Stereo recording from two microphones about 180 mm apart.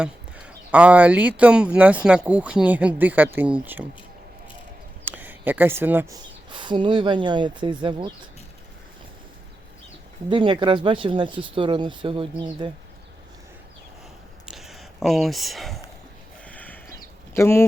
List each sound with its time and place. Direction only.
0.0 s speech: 5° right (ahead or behind)
5.0 s speech: 10° right (ahead or behind)
6.1 s speech: 25° right (ahead or behind)
10.2 s speech: 25° right (ahead or behind)
14.5 s speech: centre (ahead or behind)
16.5 s a sound: 10° left (ahead or behind)
17.3 s speech: 15° left (ahead or behind)